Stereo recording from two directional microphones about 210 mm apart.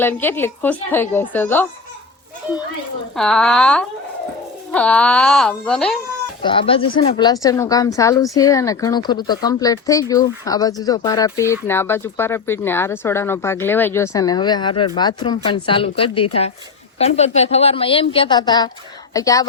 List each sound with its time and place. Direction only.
0.0 s speech: 10° left (ahead or behind)
3.2 s speech: 5° left (ahead or behind)
6.4 s a woman's voice: 25° left (ahead or behind)